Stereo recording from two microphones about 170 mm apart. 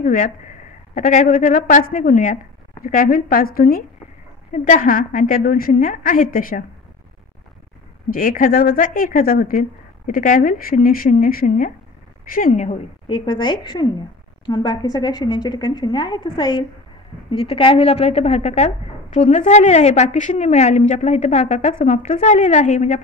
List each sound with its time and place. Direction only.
0.0 s a woman's voice: 50° left (ahead or behind)
4.5 s a woman's voice: 50° left (ahead or behind)
8.1 s a woman's voice: 55° left (ahead or behind)
13.0 s a woman's voice: 30° left (ahead or behind); by 23.0 s 45° left (ahead or behind)